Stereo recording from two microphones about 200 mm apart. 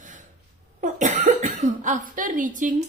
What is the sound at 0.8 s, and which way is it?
Cough, 40° right (ahead or behind).